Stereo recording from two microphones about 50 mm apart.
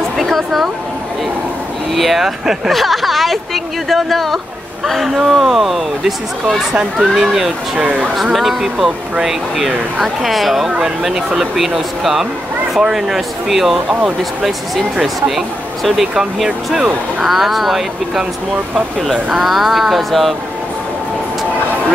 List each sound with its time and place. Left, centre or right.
0.2 s a sound: centre
2.0 s speech: centre
6.7 s speech: centre
7.2 s speech: centre
7.8 s speech: right
8.2 s speech: centre
15.0 s speech: centre
19.2 s speech: centre